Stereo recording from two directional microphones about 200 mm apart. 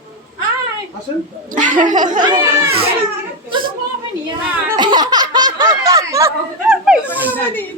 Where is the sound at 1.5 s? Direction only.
40° right (ahead or behind).